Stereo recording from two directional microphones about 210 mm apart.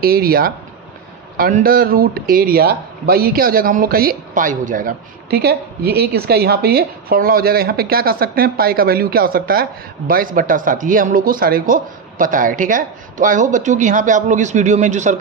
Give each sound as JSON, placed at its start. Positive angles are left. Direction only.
{"t": 0.0, "sound": "a man's voice", "side_deg": -45}